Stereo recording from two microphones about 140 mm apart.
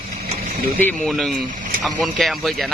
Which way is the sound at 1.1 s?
Centre (ahead or behind).